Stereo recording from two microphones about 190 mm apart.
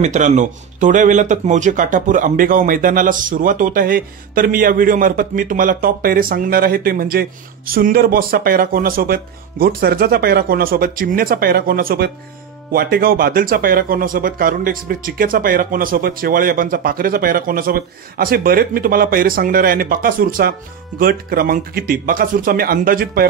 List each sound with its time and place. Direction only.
0.0 s a man's voice: 40° right (ahead or behind)